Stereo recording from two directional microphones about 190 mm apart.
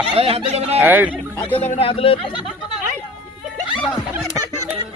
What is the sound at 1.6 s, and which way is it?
Speech, 35° left (ahead or behind).